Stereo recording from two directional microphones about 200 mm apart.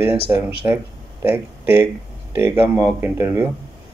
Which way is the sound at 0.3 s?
10° right (ahead or behind).